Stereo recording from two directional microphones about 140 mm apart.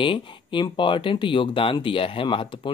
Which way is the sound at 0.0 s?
35° left (ahead or behind).